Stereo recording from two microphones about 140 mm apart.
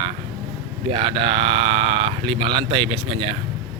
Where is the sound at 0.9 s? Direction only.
35° right (ahead or behind).